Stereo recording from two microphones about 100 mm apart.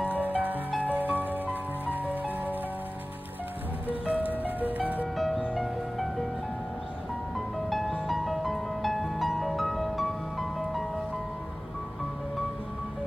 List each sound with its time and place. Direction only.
0.4 s music: 15° right (ahead or behind)
4.0 s music: 15° right (ahead or behind)
5.1 s music: centre (ahead or behind)
7.3 s music: centre (ahead or behind)